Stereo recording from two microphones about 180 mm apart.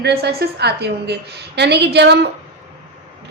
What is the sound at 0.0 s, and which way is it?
A woman's voice, 60° right (ahead or behind).